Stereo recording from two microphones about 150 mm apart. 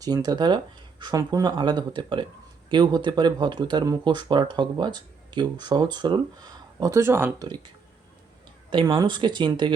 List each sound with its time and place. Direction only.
0.0 s speech: 25° right (ahead or behind)
8.7 s speech: 30° right (ahead or behind)